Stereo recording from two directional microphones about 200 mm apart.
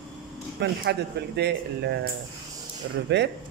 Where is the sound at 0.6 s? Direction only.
60° right (ahead or behind).